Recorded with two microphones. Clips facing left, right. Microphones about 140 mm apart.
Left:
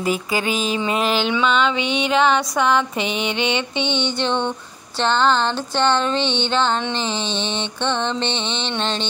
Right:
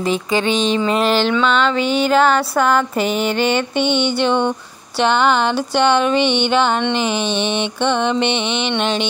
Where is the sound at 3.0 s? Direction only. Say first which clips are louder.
Right 5 dB; 45° right (ahead or behind).